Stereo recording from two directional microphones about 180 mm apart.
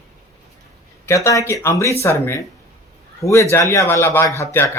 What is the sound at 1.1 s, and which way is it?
Speech, 15° left (ahead or behind).